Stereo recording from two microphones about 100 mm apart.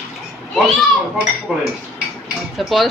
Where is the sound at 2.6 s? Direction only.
Centre (ahead or behind).